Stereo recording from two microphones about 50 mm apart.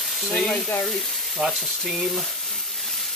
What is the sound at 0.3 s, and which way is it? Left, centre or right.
Speech, centre.